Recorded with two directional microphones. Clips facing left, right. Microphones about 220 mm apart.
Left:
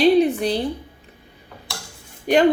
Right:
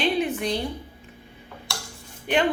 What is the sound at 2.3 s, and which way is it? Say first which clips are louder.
Speech: left 6 dB; 40° left (ahead or behind).